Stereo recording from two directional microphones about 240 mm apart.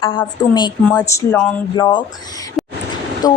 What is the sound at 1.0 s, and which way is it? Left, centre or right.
Speech, centre.